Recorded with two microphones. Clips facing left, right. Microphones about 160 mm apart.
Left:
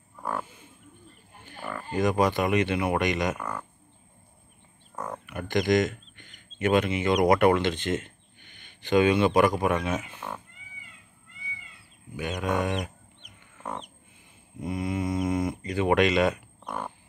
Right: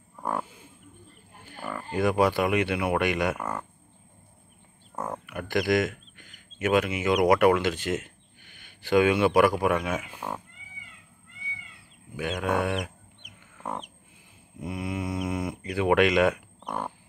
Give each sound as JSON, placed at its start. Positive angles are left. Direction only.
{"t": 0.2, "sound": "livestock", "side_deg": -15}
{"t": 1.4, "sound": "speech", "side_deg": -10}
{"t": 4.9, "sound": "a sound", "side_deg": -25}
{"t": 5.3, "sound": "speech", "side_deg": -5}
{"t": 12.4, "sound": "speech", "side_deg": -5}
{"t": 12.8, "sound": "fowl", "side_deg": -5}
{"t": 14.6, "sound": "speech", "side_deg": -5}